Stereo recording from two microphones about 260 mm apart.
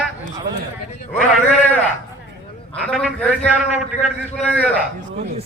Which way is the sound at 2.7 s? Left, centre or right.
Centre.